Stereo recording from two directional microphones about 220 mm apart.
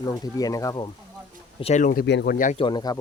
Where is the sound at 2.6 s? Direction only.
20° left (ahead or behind).